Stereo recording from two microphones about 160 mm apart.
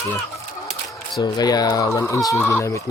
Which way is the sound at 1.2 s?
25° left (ahead or behind).